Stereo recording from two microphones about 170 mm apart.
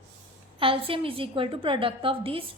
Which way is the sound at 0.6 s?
30° right (ahead or behind).